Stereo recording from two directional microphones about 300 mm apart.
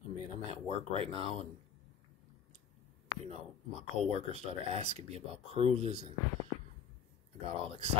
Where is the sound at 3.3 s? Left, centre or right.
Right.